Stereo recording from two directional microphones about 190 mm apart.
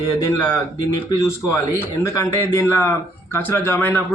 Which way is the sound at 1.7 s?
15° left (ahead or behind).